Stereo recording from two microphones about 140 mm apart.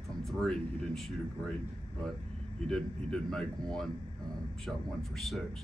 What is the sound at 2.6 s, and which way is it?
A man's voice, 5° left (ahead or behind).